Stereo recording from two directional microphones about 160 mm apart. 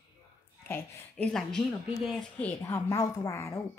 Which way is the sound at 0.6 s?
15° left (ahead or behind).